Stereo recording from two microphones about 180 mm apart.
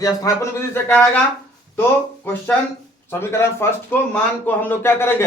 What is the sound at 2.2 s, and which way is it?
Speech, 10° left (ahead or behind).